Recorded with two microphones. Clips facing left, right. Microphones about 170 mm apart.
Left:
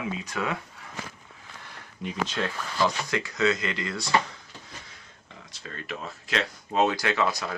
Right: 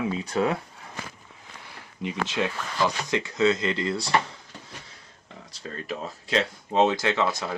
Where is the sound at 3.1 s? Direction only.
25° right (ahead or behind).